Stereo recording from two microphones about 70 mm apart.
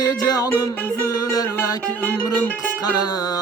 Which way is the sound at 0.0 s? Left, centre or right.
Left.